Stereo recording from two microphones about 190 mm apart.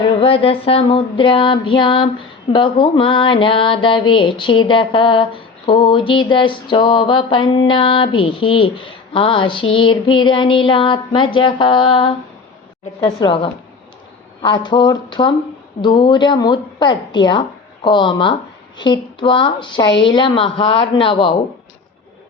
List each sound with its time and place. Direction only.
0.0 s mantra: 25° left (ahead or behind)